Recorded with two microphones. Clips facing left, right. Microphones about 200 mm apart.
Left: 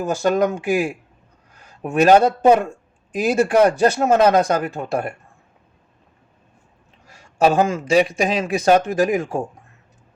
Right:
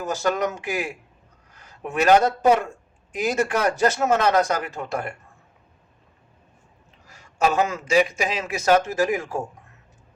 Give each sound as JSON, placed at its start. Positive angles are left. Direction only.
{"t": 0.0, "sound": "speech", "side_deg": 30}
{"t": 7.1, "sound": "speech", "side_deg": 35}